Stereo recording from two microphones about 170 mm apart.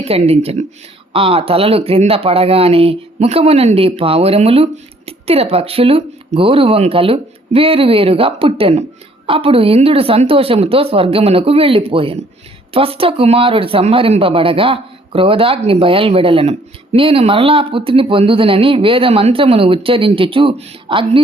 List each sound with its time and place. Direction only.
0.0 s speech: 35° right (ahead or behind)